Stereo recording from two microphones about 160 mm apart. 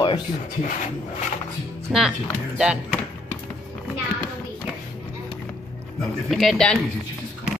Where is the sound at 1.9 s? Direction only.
5° right (ahead or behind).